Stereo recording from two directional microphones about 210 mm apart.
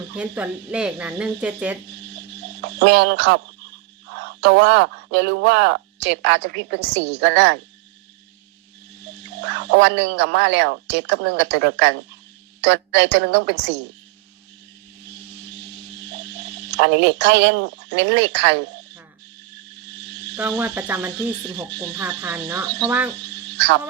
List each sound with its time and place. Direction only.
0.2 s speech: 5° right (ahead or behind)
2.6 s speech: 55° right (ahead or behind)
9.5 s speech: 55° right (ahead or behind)
16.6 s speech: 55° right (ahead or behind)
20.0 s cricket: 55° right (ahead or behind)
20.4 s cricket: 10° right (ahead or behind)
21.8 s speech: 20° right (ahead or behind)
22.9 s cricket: 10° right (ahead or behind)
23.5 s frog: 55° right (ahead or behind)